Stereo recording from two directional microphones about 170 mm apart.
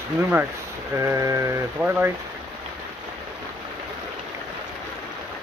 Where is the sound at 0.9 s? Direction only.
15° right (ahead or behind).